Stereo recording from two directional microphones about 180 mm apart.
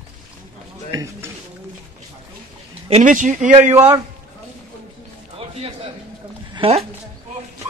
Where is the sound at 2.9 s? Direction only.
45° right (ahead or behind).